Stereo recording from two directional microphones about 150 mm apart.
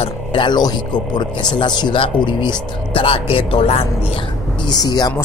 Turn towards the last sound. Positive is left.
turn(degrees=25)  # may be behind; listen again after turning